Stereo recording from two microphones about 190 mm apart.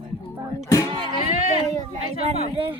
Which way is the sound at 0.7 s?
20° left (ahead or behind).